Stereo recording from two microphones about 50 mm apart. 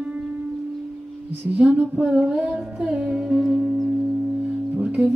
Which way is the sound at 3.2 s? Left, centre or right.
Centre.